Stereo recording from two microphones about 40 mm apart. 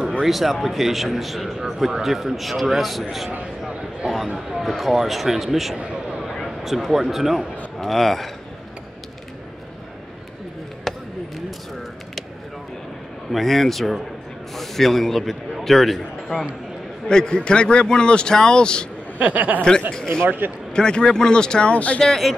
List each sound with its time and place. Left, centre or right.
0.2 s speech: centre
4.5 s a man's voice: centre
7.8 s speech: centre
13.3 s a man's voice: centre
17.1 s speech: centre
19.1 s speech: right
19.9 s a man's voice: centre
20.2 s speech: right
20.7 s speech: left
21.7 s speech: left